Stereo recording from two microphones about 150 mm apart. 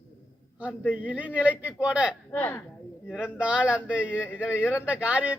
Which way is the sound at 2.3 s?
10° left (ahead or behind).